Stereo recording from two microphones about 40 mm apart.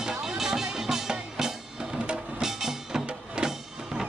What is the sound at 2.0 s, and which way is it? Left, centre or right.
Music, right.